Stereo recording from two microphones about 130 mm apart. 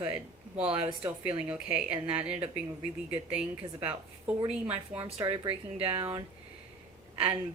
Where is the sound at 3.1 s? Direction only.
10° right (ahead or behind).